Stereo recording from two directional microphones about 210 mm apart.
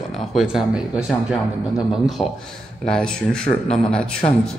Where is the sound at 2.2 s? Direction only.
Centre (ahead or behind).